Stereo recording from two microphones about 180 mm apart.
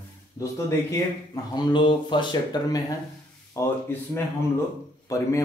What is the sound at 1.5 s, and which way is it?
A man's voice, 25° left (ahead or behind).